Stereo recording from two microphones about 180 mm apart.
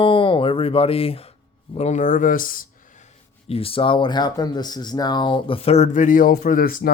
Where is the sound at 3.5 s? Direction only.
30° left (ahead or behind).